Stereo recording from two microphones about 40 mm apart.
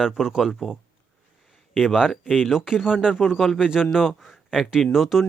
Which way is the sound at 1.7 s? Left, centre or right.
Centre.